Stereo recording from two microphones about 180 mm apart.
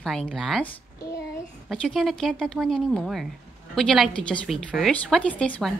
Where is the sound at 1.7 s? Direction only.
5° left (ahead or behind).